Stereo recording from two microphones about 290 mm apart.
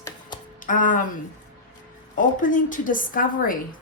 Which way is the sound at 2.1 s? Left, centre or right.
Left.